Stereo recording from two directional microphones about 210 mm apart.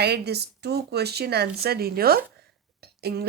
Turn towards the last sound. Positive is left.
turn(degrees=-50)  # may be behind; listen again after turning